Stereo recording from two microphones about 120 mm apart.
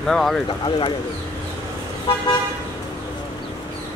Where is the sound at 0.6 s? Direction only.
45° left (ahead or behind).